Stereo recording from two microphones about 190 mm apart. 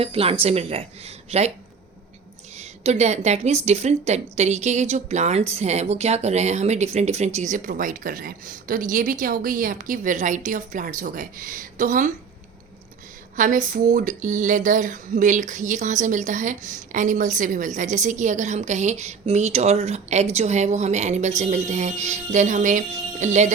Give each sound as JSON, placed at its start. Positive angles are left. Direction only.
{"t": 0.0, "sound": "speech", "side_deg": -30}
{"t": 2.6, "sound": "a woman's voice", "side_deg": -35}
{"t": 13.3, "sound": "speech", "side_deg": -45}